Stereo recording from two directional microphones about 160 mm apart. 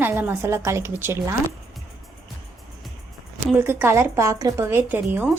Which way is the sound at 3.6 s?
15° right (ahead or behind).